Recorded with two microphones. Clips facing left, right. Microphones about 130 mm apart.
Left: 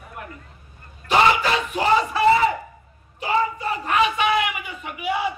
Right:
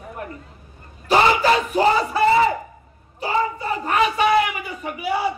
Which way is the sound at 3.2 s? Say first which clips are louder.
Even; 35° right (ahead or behind).